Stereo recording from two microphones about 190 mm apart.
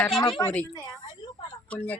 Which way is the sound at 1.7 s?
5° left (ahead or behind).